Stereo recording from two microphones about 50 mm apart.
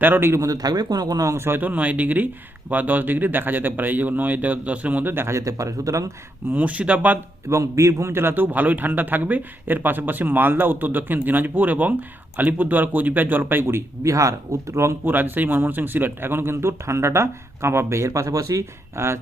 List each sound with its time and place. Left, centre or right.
0.0 s speech: right
1.6 s speech: right
5.1 s speech: right
6.5 s speech: right
7.5 s speech: right
8.1 s speech: right
14.0 s speech: right
15.0 s speech: right